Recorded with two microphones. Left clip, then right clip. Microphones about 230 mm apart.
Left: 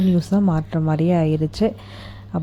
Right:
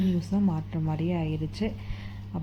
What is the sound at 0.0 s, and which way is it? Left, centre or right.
Speech, left.